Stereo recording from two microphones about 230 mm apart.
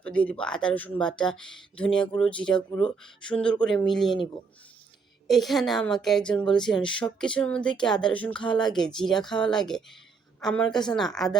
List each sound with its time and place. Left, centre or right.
0.0 s a woman's voice: centre
5.3 s a woman's voice: centre